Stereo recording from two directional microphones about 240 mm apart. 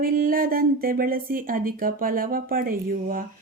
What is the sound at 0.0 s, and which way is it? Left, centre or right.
Speech, right.